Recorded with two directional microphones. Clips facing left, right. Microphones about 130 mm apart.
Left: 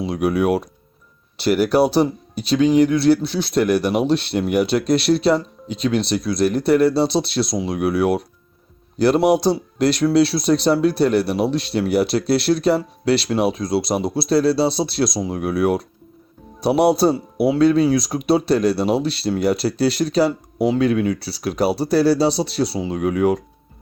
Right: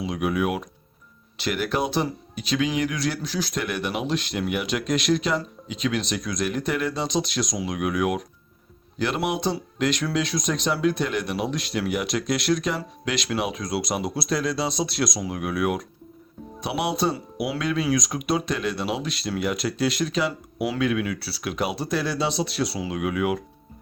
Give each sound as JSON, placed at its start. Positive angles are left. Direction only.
{"t": 0.0, "sound": "speech", "side_deg": 40}